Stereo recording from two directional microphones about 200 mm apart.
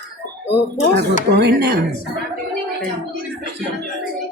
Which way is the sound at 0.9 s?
55° right (ahead or behind).